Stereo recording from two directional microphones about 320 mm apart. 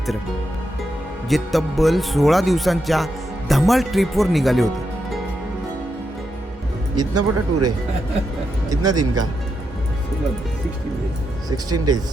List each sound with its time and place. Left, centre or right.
1.3 s speech: centre
6.9 s speech: centre
7.5 s speech: right
8.7 s speech: centre
11.4 s speech: centre